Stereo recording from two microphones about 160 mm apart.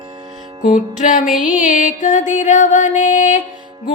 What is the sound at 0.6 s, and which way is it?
Music, 50° left (ahead or behind).